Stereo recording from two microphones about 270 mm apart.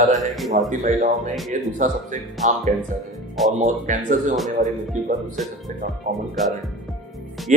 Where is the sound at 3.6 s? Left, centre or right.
Right.